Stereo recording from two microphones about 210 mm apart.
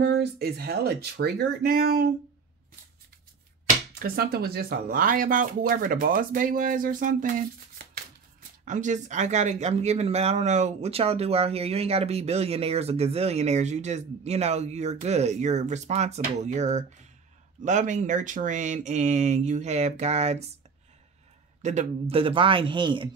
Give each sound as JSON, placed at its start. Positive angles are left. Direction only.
{"t": 0.0, "sound": "speech", "side_deg": -50}
{"t": 4.0, "sound": "speech", "side_deg": -45}
{"t": 8.6, "sound": "speech", "side_deg": -35}
{"t": 21.6, "sound": "speech", "side_deg": -30}